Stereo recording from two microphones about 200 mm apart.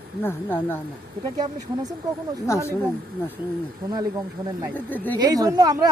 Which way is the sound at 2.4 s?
15° left (ahead or behind).